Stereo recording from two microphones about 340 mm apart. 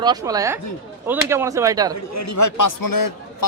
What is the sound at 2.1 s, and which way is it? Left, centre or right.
Speech, left.